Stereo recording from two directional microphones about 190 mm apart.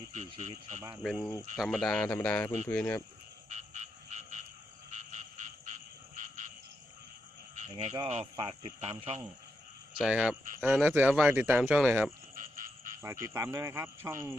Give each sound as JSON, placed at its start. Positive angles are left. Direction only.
{"t": 0.1, "sound": "speech", "side_deg": -40}
{"t": 1.0, "sound": "speech", "side_deg": 0}
{"t": 3.5, "sound": "frog", "side_deg": -40}
{"t": 7.7, "sound": "speech", "side_deg": -30}
{"t": 10.0, "sound": "speech", "side_deg": -5}
{"t": 12.3, "sound": "frog", "side_deg": -45}
{"t": 13.2, "sound": "speech", "side_deg": -15}